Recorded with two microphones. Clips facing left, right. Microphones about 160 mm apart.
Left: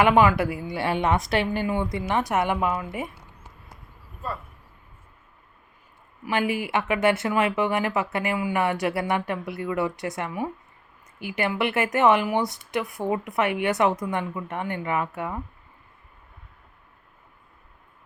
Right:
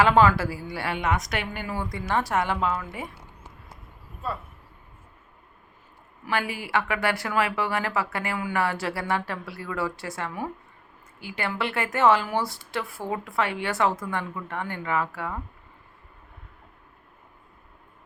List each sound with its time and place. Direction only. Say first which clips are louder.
0.0 s speech: left 1 dB; 15° left (ahead or behind)
6.2 s speech: left 4 dB; 20° left (ahead or behind)